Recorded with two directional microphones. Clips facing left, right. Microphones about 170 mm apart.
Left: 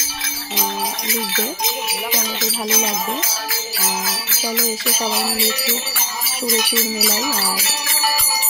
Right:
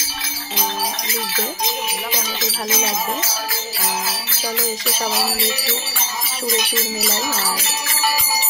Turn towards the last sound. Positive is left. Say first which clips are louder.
# left 1 dB
turn(degrees=5)  # may be behind; listen again after turning